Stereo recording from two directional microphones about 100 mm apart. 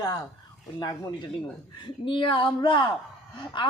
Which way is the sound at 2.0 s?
60° left (ahead or behind).